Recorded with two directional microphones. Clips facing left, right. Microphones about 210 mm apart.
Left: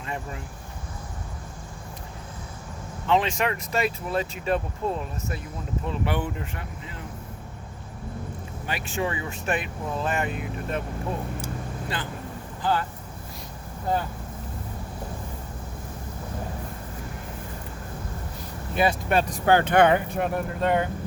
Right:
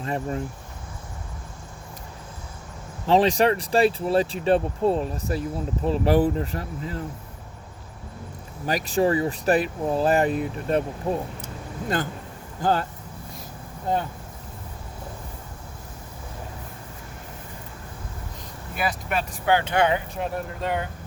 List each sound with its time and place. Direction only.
0.0 s speech: 40° right (ahead or behind)
3.1 s speech: 35° right (ahead or behind)
8.6 s speech: 40° right (ahead or behind)
12.6 s speech: 45° right (ahead or behind)
19.0 s speech: 35° left (ahead or behind); by 20.7 s 55° left (ahead or behind)